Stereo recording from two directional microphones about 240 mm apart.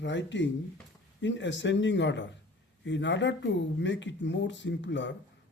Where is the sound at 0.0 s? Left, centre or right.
Left.